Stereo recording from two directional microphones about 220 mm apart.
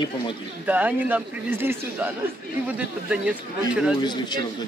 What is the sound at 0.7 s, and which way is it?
Speech, 5° right (ahead or behind).